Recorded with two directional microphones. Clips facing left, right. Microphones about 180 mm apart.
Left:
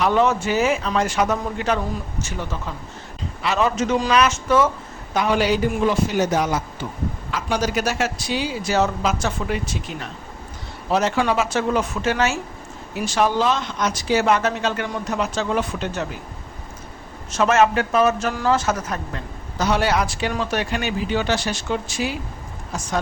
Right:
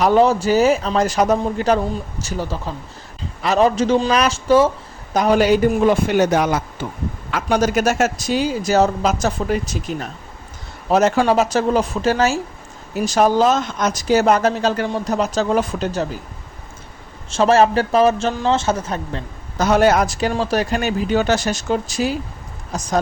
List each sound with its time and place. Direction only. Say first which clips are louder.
0.0 s speech: right 4 dB; 35° right (ahead or behind)
5.1 s speech: right 5 dB; 40° right (ahead or behind)
17.3 s speech: right 3 dB; 30° right (ahead or behind)
19.5 s speech: right 6 dB; 45° right (ahead or behind)